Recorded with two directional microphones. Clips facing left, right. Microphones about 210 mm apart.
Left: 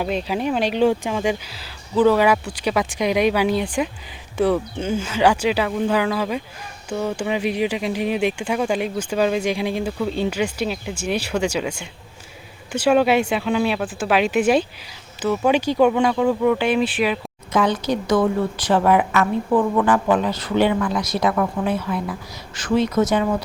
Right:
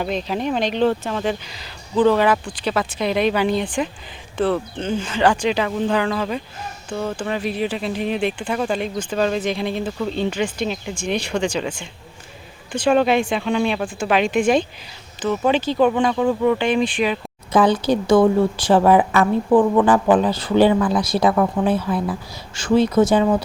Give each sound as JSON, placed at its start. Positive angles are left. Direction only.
{"t": 0.0, "sound": "speech", "side_deg": 10}
{"t": 17.5, "sound": "a woman's voice", "side_deg": -30}